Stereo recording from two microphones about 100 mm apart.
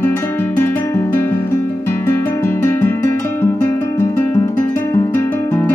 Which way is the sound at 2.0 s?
25° left (ahead or behind).